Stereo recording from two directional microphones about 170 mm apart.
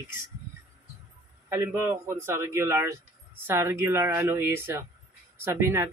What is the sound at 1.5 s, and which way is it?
Speech, 15° right (ahead or behind).